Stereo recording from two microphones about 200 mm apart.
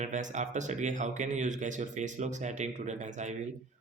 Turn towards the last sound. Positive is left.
turn(degrees=-35)  # may be behind; listen again after turning